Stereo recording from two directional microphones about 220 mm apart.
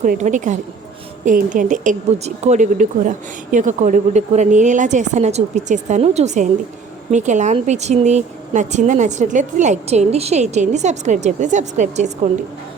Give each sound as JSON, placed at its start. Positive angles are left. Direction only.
{"t": 0.0, "sound": "a woman's voice", "side_deg": -35}